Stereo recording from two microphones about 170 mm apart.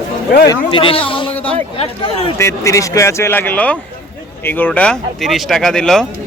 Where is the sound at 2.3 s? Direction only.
15° left (ahead or behind).